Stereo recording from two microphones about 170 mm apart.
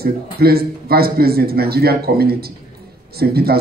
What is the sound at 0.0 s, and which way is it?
A man's voice, 65° right (ahead or behind).